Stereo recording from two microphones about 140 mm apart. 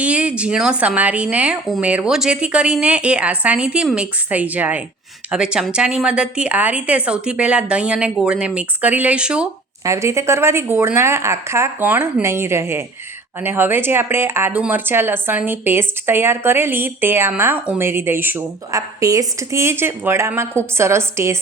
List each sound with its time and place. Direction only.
0.0 s speech: 10° right (ahead or behind)
9.8 s speech: 20° right (ahead or behind)